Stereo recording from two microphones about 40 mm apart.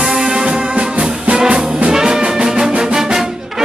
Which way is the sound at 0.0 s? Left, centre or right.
Centre.